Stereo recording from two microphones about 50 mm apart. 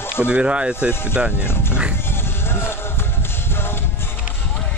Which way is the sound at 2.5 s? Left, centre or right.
Left.